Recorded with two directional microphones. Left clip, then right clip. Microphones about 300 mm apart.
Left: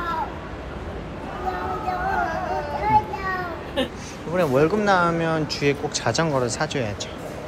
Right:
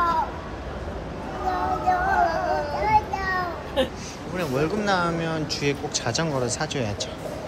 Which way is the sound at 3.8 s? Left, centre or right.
Right.